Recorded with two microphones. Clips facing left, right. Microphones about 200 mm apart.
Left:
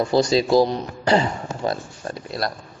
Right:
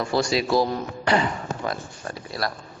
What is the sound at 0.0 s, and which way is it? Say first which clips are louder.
Speech: left 5 dB; 20° left (ahead or behind).